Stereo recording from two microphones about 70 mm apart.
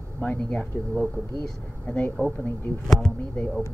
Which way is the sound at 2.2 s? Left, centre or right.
Right.